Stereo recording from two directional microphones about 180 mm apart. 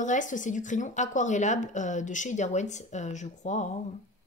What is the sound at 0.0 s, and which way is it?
Speech, 45° left (ahead or behind).